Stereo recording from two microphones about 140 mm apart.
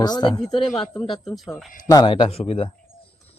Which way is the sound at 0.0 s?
30° left (ahead or behind).